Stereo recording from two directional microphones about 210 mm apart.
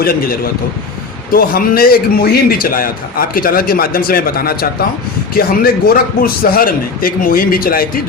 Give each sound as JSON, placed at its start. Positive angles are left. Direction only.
{"t": 0.0, "sound": "a man's voice", "side_deg": 45}